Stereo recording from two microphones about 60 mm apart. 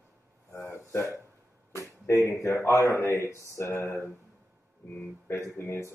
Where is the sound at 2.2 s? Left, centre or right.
Left.